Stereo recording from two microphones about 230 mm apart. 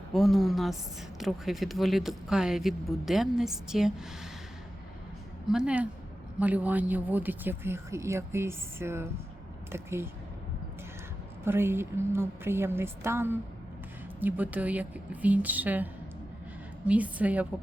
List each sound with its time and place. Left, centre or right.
0.1 s speech: centre
5.5 s speech: centre
11.4 s speech: centre